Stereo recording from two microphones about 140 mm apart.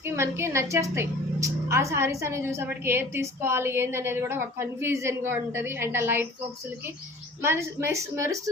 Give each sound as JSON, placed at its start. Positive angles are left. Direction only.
{"t": 0.0, "sound": "a woman's voice", "side_deg": -20}
{"t": 7.4, "sound": "a woman's voice", "side_deg": -15}